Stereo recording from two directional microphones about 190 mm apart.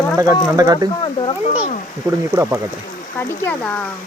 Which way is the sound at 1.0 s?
25° left (ahead or behind).